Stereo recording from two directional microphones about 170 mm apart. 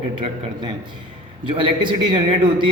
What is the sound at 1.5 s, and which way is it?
A man's voice, 30° right (ahead or behind).